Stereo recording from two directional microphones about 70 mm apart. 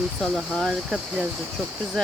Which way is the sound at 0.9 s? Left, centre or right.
Centre.